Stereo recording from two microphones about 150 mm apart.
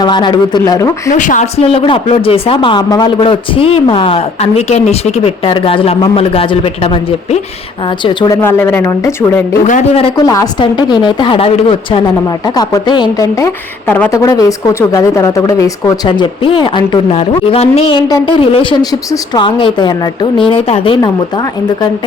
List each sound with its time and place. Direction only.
0.0 s speech: 30° left (ahead or behind)
1.1 s speech: 55° left (ahead or behind); by 8.4 s 30° left (ahead or behind)
8.4 s speech: 15° left (ahead or behind)
9.6 s speech: 55° left (ahead or behind)
10.2 s speech: 25° left (ahead or behind)
14.1 s speech: 20° left (ahead or behind)
16.0 s speech: 35° left (ahead or behind)
17.1 s a woman's voice: 45° left (ahead or behind)